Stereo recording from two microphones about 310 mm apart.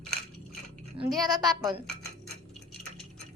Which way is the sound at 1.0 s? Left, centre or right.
Centre.